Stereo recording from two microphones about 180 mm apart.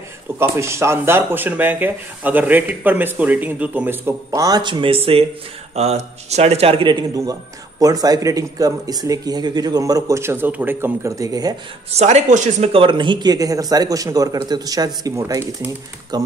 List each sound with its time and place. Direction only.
0.4 s a man's voice: 15° right (ahead or behind)
11.9 s speech: 40° right (ahead or behind); by 16.2 s 15° right (ahead or behind)